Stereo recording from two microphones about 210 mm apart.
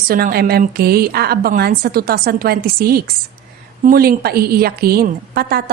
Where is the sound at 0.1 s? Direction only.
45° right (ahead or behind).